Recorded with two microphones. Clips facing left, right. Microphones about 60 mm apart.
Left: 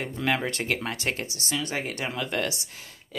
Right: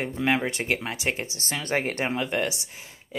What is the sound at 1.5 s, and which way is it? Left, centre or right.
Speech, right.